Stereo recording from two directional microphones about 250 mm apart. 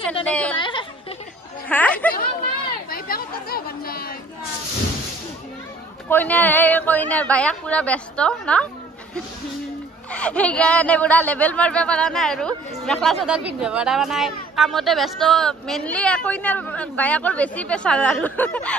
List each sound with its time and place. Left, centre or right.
0.2 s speech: centre
0.6 s a sound: centre
1.7 s a woman's voice: centre
2.9 s chatter: left
6.0 s speech: centre
10.1 s speech: centre